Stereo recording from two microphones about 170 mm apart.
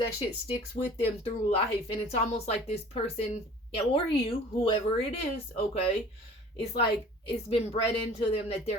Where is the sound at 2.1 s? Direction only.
40° left (ahead or behind).